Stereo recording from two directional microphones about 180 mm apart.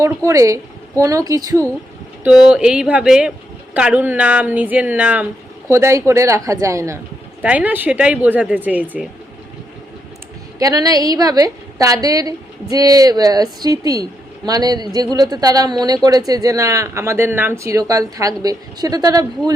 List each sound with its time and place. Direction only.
0.3 s speech: 15° right (ahead or behind)
2.2 s speech: 5° right (ahead or behind)
10.6 s speech: 20° right (ahead or behind)